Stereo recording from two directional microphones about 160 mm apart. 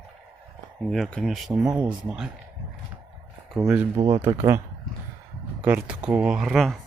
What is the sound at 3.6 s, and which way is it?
Speech, 10° right (ahead or behind).